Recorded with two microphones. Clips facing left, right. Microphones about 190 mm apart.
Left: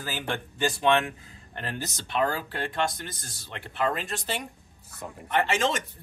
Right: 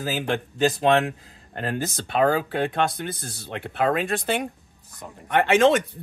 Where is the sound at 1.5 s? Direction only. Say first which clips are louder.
Right 7 dB; 45° right (ahead or behind).